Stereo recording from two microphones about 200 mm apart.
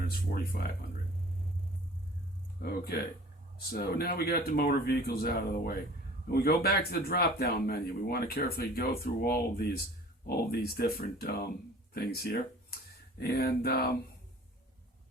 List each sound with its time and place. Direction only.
0.1 s speech: 50° left (ahead or behind)
2.6 s speech: 50° left (ahead or behind)